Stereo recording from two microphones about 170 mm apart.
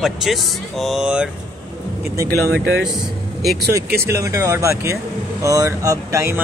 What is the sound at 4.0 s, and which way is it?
Speech, 15° right (ahead or behind).